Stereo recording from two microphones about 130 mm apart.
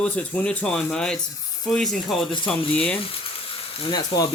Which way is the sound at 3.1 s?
45° left (ahead or behind).